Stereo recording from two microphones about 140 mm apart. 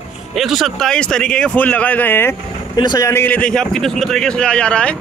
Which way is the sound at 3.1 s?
15° left (ahead or behind).